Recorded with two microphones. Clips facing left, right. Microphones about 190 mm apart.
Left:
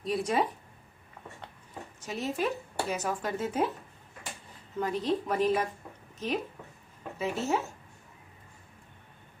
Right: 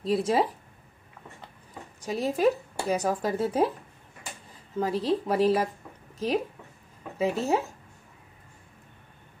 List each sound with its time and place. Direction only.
0.0 s speech: 30° right (ahead or behind)
2.0 s speech: 35° right (ahead or behind)
4.7 s speech: 30° right (ahead or behind)